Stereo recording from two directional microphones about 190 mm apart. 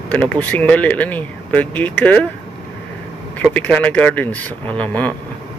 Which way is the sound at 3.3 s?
10° left (ahead or behind).